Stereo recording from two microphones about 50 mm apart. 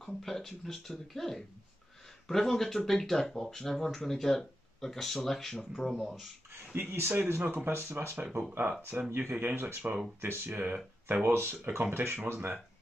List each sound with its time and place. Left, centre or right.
0.0 s speech: centre
6.5 s speech: right
8.2 s speech: right
9.1 s speech: right